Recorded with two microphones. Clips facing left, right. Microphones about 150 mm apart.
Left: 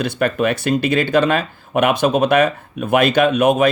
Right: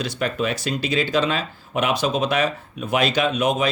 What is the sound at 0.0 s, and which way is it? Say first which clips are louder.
Speech: left 6 dB; 55° left (ahead or behind).